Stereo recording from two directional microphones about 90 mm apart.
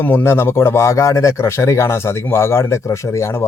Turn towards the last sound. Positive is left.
turn(degrees=30)  # may be behind; listen again after turning